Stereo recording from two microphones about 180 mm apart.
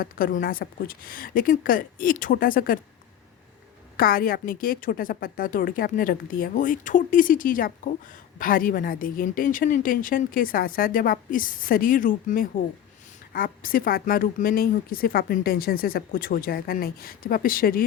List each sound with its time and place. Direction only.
0.0 s a woman's voice: 50° left (ahead or behind)
3.9 s a woman's voice: 50° left (ahead or behind)